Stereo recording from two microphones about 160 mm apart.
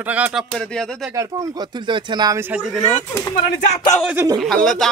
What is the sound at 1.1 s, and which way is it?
Speech, 20° right (ahead or behind).